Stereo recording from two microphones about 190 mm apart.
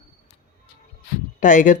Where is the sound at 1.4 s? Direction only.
40° left (ahead or behind).